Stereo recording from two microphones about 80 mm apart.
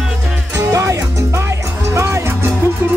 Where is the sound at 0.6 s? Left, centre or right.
Right.